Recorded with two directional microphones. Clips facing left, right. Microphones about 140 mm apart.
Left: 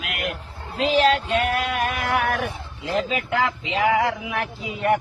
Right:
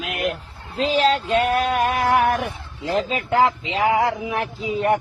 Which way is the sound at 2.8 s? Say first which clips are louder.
Right 2 dB; 35° right (ahead or behind).